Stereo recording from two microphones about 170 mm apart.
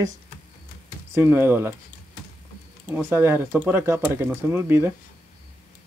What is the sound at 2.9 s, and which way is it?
Speech, 10° right (ahead or behind).